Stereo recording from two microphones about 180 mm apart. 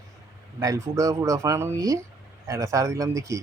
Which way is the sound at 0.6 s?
20° right (ahead or behind).